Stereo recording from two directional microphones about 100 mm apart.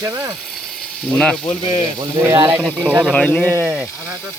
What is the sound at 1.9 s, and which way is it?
Speech, 35° right (ahead or behind).